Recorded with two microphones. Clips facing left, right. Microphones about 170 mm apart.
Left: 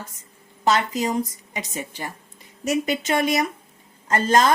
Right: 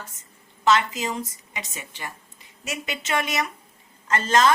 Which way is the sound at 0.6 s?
35° left (ahead or behind).